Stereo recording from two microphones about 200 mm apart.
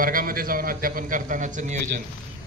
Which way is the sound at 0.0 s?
45° right (ahead or behind).